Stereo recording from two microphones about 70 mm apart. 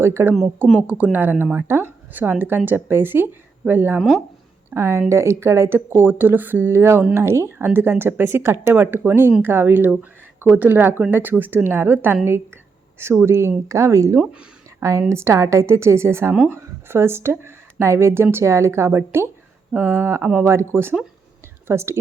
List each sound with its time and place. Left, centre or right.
0.0 s speech: right
0.9 s speech: right
13.2 s a woman's voice: right